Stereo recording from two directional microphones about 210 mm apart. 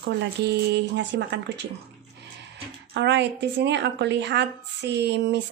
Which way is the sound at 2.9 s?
55° right (ahead or behind).